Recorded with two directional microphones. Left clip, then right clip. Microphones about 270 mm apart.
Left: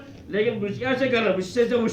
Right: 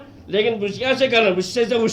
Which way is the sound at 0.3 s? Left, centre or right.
Right.